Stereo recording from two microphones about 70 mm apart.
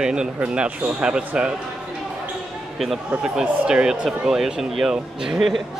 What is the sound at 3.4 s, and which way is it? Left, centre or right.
Speech, centre.